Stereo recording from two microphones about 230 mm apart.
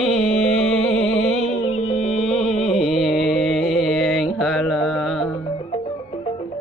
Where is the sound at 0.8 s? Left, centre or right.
Left.